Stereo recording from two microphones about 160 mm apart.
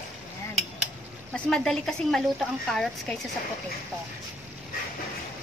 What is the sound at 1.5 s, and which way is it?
A woman's voice, 5° left (ahead or behind).